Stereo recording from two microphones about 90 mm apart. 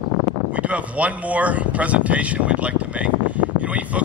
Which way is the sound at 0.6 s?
15° right (ahead or behind).